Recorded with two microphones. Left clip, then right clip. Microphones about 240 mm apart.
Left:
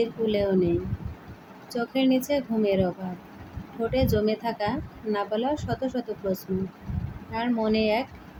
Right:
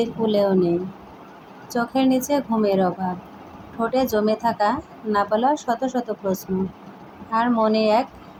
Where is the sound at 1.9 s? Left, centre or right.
Centre.